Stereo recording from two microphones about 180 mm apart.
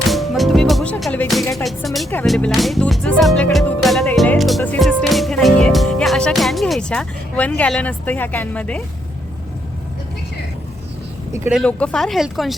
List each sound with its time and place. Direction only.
0.1 s music: centre (ahead or behind)
1.6 s speech: centre (ahead or behind)
2.2 s music: centre (ahead or behind)
11.3 s speech: 15° right (ahead or behind)
11.5 s speech: 5° left (ahead or behind)